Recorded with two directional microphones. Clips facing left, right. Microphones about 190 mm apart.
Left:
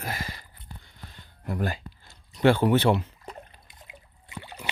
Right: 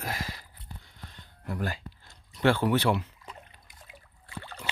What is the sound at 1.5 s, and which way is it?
Speech, 20° left (ahead or behind).